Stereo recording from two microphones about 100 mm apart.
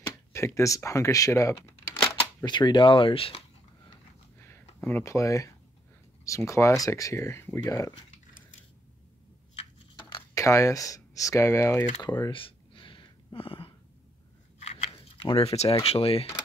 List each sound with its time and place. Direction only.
0.0 s speech: 30° left (ahead or behind)
2.0 s speech: 45° left (ahead or behind); by 3.4 s 70° left (ahead or behind)
4.4 s a sound: 25° left (ahead or behind)
5.0 s speech: 30° left (ahead or behind)
7.6 s speech: 35° left (ahead or behind)
10.3 s speech: 30° left (ahead or behind)
12.0 s speech: 45° left (ahead or behind)
12.4 s a sound: 60° left (ahead or behind)
14.6 s a sound: 90° left